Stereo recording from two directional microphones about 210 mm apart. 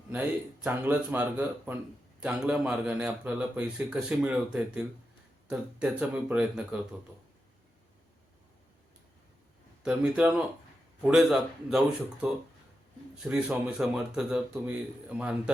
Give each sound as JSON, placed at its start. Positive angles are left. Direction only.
{"t": 0.1, "sound": "a man's voice", "side_deg": -10}
{"t": 9.8, "sound": "a man's voice", "side_deg": -5}
{"t": 13.2, "sound": "a man's voice", "side_deg": -5}